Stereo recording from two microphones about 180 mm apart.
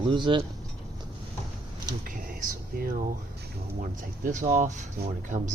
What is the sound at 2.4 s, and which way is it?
Speech, 55° right (ahead or behind).